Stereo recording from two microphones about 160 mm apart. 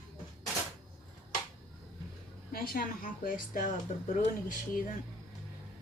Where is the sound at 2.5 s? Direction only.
65° left (ahead or behind).